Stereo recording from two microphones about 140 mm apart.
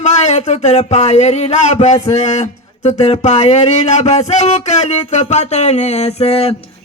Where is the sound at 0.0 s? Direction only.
50° left (ahead or behind).